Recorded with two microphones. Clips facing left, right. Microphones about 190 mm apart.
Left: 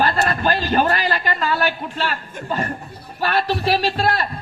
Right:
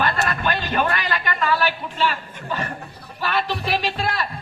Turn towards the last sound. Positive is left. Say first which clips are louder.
# left 4 dB
turn(degrees=45)  # may be behind; listen again after turning